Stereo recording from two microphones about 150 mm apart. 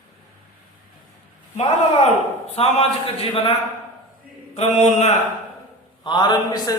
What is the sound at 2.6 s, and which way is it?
Speech, 40° left (ahead or behind).